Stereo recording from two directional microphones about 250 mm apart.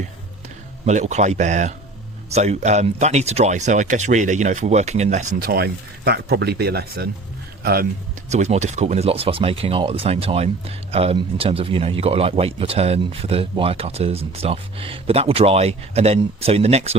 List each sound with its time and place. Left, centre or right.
0.9 s speech: right
8.3 s speech: right